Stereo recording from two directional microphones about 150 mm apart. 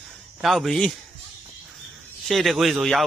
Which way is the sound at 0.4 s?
Centre (ahead or behind).